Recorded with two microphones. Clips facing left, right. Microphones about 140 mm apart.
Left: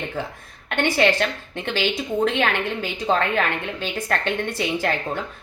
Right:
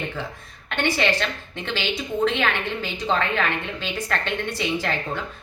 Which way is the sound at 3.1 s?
45° left (ahead or behind).